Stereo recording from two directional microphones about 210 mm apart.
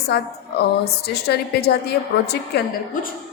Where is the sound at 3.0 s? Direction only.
40° left (ahead or behind).